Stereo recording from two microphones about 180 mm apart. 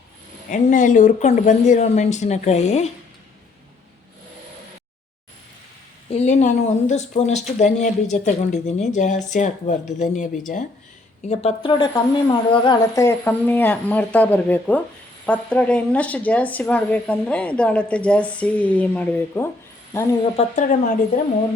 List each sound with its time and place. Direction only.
0.5 s speech: 45° left (ahead or behind)
6.1 s speech: 35° left (ahead or behind)
11.3 s speech: 30° left (ahead or behind); by 20.1 s 15° left (ahead or behind)
20.3 s speech: 45° left (ahead or behind)